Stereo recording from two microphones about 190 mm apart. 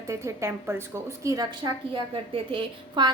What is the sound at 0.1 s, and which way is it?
A woman's voice, 15° right (ahead or behind).